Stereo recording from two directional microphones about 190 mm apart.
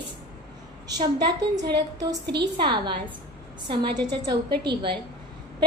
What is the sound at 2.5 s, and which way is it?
A woman's voice, 25° right (ahead or behind).